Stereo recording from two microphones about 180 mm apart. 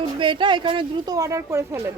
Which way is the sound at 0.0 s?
25° right (ahead or behind).